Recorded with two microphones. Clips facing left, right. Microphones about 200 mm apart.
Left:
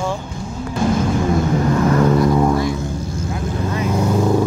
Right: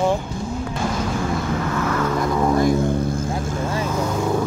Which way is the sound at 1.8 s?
35° left (ahead or behind).